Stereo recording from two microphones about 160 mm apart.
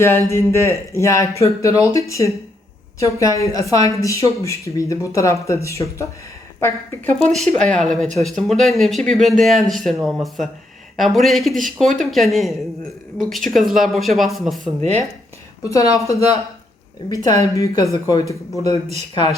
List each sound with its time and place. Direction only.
0.0 s a woman's voice: 15° left (ahead or behind); by 14.7 s centre (ahead or behind)
14.8 s speech: 45° right (ahead or behind)
15.7 s a woman's voice: 20° left (ahead or behind)